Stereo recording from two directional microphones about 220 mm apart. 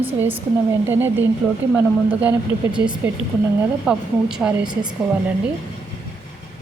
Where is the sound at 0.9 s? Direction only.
10° right (ahead or behind).